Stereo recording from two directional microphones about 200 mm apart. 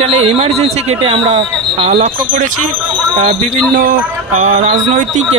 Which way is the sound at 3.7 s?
40° right (ahead or behind).